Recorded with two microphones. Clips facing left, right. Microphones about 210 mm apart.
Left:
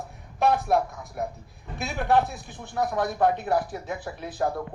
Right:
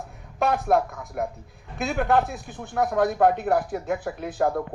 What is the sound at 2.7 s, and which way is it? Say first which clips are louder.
Speech: right 4 dB; 50° right (ahead or behind).